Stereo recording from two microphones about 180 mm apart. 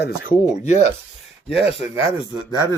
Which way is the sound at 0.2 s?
45° left (ahead or behind).